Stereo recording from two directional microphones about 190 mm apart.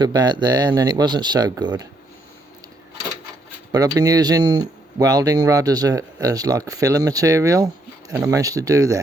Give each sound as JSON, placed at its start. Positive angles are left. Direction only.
{"t": 0.0, "sound": "speech", "side_deg": -20}
{"t": 3.7, "sound": "speech", "side_deg": -20}